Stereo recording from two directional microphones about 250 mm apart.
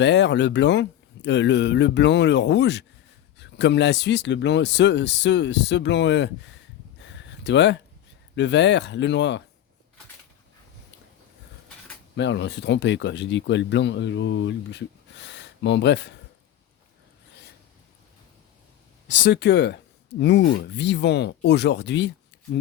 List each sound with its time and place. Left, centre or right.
0.0 s speech: left
7.0 s a sound: left
8.4 s speech: left
12.1 s speech: left
19.2 s speech: left